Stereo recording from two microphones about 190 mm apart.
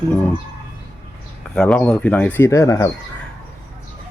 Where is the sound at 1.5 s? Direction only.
5° left (ahead or behind).